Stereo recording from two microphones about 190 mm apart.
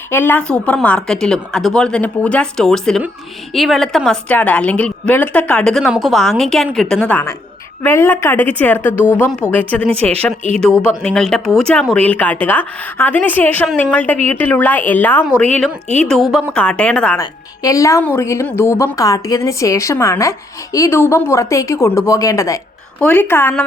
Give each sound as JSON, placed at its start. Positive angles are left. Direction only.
{"t": 0.1, "sound": "a woman's voice", "side_deg": 10}
{"t": 17.2, "sound": "speech", "side_deg": 20}